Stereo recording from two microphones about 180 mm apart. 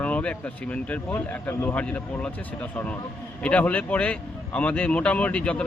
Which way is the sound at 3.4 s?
5° left (ahead or behind).